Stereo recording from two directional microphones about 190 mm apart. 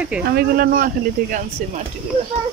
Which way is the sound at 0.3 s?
55° right (ahead or behind).